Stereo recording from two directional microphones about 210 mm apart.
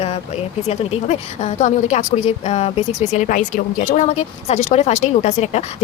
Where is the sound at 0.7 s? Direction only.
30° left (ahead or behind).